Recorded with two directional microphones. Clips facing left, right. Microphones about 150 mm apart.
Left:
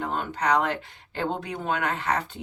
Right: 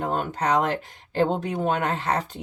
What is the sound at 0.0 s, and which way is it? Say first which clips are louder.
Speech: right 2 dB; 45° right (ahead or behind).